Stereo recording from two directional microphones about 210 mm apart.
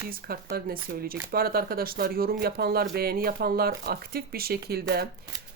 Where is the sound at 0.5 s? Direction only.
45° right (ahead or behind).